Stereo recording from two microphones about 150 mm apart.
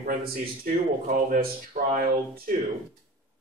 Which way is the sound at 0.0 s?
60° right (ahead or behind).